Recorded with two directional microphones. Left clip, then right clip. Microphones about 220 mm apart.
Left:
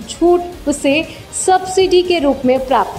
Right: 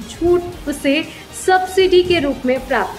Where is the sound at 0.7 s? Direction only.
15° left (ahead or behind).